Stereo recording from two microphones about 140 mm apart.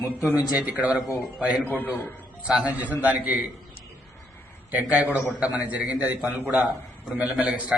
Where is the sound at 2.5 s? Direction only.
10° right (ahead or behind).